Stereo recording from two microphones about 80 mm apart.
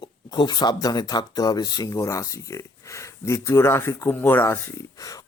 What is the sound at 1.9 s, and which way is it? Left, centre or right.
Speech, left.